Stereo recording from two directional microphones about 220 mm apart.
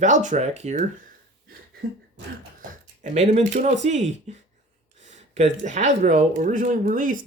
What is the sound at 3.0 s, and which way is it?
Speech, 30° right (ahead or behind).